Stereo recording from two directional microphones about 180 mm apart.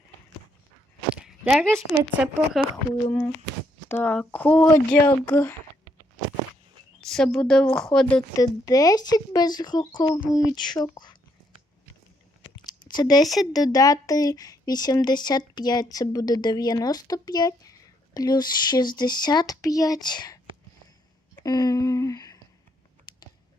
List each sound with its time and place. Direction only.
1.1 s speech: 5° right (ahead or behind)
3.8 s speech: 10° left (ahead or behind)
5.0 s speech: 20° left (ahead or behind)
7.1 s a woman's voice: centre (ahead or behind)
8.4 s speech: 20° left (ahead or behind)
12.6 s a sound: 25° left (ahead or behind)
13.2 s a woman's voice: centre (ahead or behind)
13.5 s speech: 20° left (ahead or behind)
21.4 s a sound: 20° left (ahead or behind)